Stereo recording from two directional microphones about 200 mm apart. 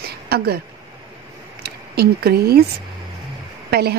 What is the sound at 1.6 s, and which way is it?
Speech, 50° right (ahead or behind).